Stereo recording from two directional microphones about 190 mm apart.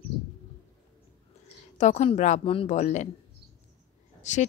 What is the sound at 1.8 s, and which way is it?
Speech, 35° left (ahead or behind).